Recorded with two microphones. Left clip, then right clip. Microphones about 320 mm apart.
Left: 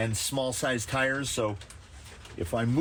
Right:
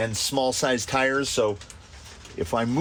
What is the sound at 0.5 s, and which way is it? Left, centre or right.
Speech, right.